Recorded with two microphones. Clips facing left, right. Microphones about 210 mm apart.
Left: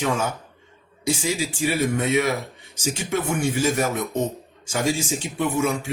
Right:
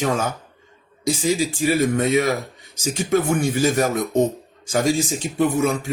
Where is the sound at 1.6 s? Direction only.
40° right (ahead or behind).